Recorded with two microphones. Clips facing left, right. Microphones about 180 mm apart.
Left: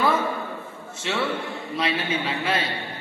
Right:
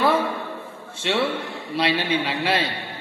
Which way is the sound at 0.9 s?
30° right (ahead or behind).